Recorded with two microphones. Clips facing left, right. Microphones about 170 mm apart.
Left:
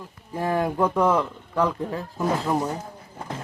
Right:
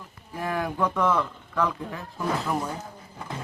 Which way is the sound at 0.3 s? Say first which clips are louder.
Left 5 dB; 30° left (ahead or behind).